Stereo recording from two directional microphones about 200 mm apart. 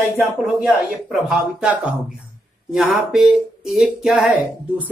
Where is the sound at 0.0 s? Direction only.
5° right (ahead or behind).